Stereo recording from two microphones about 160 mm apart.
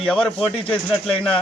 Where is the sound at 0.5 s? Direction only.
35° left (ahead or behind).